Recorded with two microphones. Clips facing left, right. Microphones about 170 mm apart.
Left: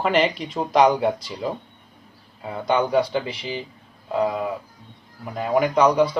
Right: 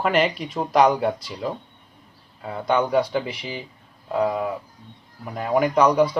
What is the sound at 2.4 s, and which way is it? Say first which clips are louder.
Speech: even; 10° left (ahead or behind).